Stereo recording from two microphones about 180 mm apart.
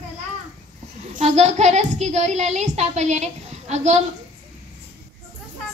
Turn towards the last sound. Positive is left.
turn(degrees=-40)  # may be behind; listen again after turning